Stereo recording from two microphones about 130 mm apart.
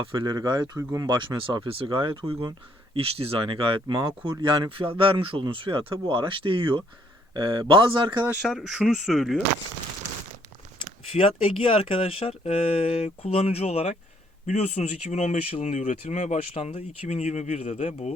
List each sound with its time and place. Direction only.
0.1 s speech: 35° right (ahead or behind)
0.8 s speech: 20° right (ahead or behind)
1.0 s speech: 35° right (ahead or behind)
8.2 s speech: 10° right (ahead or behind)
11.1 s speech: 50° left (ahead or behind)